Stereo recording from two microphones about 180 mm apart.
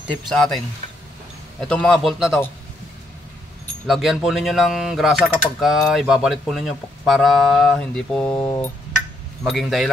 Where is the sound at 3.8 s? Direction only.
Centre (ahead or behind).